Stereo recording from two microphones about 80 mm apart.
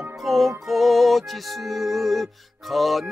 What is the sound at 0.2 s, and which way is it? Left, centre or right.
Music, centre.